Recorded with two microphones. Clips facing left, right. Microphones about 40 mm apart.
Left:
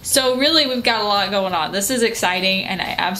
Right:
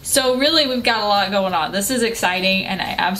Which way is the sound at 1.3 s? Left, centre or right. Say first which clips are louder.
Right 1 dB; centre.